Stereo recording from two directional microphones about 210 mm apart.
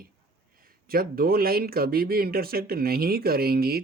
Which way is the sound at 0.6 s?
45° right (ahead or behind).